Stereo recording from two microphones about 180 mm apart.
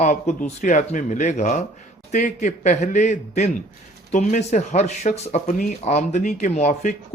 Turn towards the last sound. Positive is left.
turn(degrees=40)  # may be behind; listen again after turning